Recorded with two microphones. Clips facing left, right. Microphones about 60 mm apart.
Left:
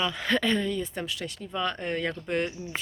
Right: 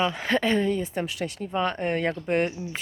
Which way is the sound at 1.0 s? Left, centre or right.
Right.